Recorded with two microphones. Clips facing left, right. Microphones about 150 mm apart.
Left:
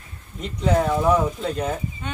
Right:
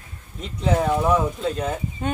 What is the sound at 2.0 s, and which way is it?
Speech, 45° right (ahead or behind).